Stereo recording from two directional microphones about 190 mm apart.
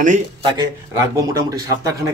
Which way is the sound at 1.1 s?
20° right (ahead or behind).